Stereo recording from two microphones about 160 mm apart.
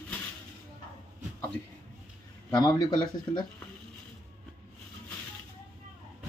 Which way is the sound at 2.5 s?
25° left (ahead or behind).